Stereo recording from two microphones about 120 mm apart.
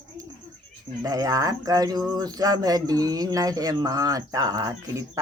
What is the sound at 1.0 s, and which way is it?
Speech, 30° right (ahead or behind).